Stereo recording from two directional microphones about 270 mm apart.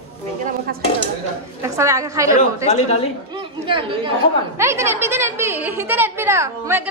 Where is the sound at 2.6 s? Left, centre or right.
Left.